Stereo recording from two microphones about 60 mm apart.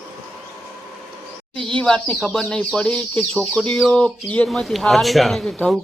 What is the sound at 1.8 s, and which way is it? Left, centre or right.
Speech, centre.